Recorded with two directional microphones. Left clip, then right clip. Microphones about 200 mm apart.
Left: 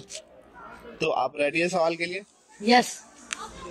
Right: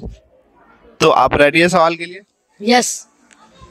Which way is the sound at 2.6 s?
60° right (ahead or behind).